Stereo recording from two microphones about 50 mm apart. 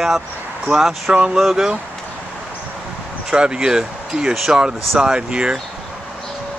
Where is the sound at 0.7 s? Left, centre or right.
Centre.